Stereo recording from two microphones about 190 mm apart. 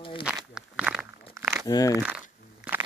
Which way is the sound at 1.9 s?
5° right (ahead or behind).